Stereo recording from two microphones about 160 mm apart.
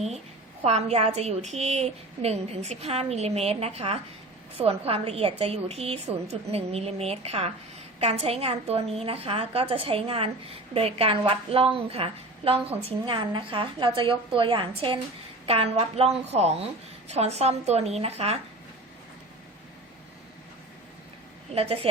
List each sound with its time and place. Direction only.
0.6 s a woman's voice: 45° right (ahead or behind)
21.5 s a woman's voice: 40° right (ahead or behind)